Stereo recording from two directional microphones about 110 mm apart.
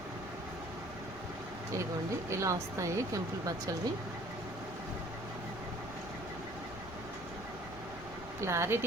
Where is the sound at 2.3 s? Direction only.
25° right (ahead or behind).